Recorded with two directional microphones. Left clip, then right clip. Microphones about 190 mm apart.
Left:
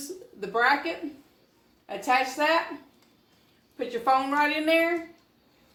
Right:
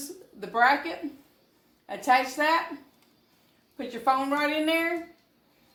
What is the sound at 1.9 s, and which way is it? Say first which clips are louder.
Speech: right 1 dB; 35° right (ahead or behind).